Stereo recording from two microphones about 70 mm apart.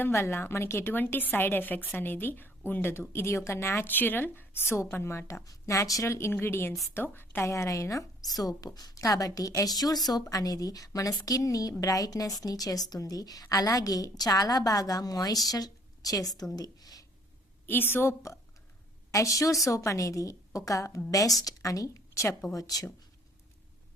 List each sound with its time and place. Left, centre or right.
0.0 s a woman's voice: left
5.5 s a woman's voice: left
7.4 s a woman's voice: left
8.4 s a woman's voice: left
17.7 s a woman's voice: left
19.1 s a woman's voice: left
22.5 s a woman's voice: left